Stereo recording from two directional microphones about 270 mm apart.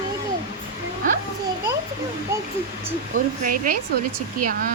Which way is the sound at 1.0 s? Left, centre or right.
Right.